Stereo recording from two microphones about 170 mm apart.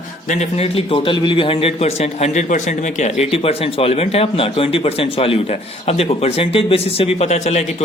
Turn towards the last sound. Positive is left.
turn(degrees=40)  # may be behind; listen again after turning